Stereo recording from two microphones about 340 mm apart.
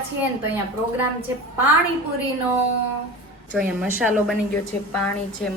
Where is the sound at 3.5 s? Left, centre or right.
Centre.